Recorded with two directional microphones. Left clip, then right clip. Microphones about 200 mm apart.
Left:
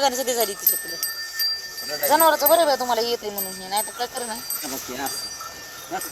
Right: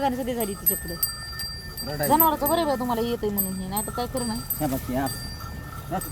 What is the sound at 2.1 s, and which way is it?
Speech, 35° left (ahead or behind).